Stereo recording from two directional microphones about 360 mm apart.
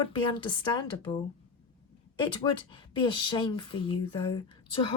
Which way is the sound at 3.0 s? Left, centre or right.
Centre.